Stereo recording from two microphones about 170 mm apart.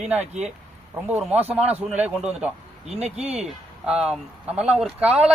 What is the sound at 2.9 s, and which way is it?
Speech, 40° right (ahead or behind).